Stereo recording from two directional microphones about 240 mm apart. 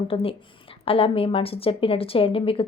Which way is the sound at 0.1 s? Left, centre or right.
Left.